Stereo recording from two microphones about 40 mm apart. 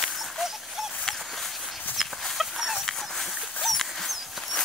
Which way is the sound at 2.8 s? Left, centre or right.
Centre.